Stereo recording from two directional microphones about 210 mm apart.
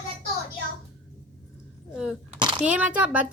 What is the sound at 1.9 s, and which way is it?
Speech, centre (ahead or behind).